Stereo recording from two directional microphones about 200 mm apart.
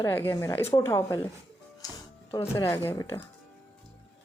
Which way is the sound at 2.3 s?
15° left (ahead or behind).